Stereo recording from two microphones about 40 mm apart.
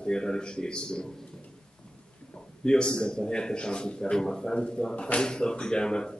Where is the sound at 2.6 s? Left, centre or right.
Left.